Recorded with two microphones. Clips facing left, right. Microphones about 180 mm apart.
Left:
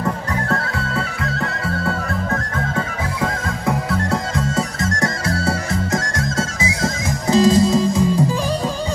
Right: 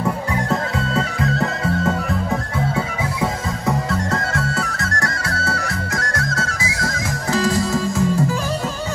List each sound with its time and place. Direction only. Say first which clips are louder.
0.9 s music: right 6 dB; 20° right (ahead or behind)
2.5 s music: right 1 dB; 10° right (ahead or behind)
4.1 s music: left 1 dB; 15° left (ahead or behind)